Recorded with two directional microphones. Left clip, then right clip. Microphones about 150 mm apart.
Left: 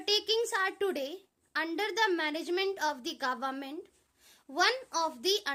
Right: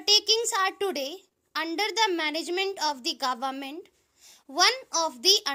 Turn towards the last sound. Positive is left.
turn(degrees=-40)  # may be behind; listen again after turning